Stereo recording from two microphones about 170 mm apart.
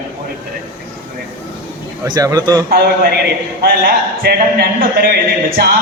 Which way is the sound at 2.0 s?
25° right (ahead or behind).